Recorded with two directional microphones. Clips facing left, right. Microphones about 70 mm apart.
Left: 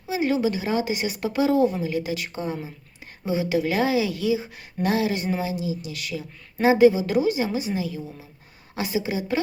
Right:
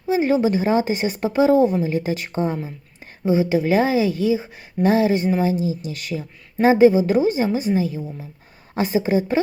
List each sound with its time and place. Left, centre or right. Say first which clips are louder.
0.1 s a woman's voice: right 5 dB; right